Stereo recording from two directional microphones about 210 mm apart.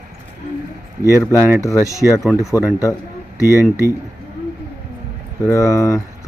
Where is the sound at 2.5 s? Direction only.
15° left (ahead or behind).